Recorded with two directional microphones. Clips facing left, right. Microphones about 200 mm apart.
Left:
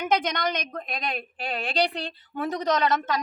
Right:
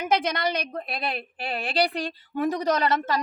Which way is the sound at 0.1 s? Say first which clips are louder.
Right 2 dB; 5° right (ahead or behind).